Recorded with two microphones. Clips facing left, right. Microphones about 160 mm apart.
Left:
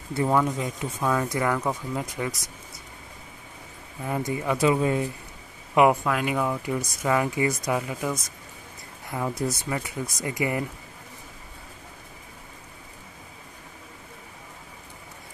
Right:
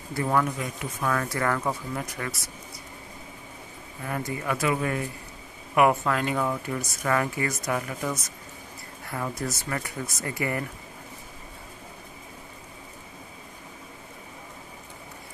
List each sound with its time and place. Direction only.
0.1 s speech: 20° left (ahead or behind)
4.0 s speech: 20° left (ahead or behind)
6.0 s speech: 10° left (ahead or behind)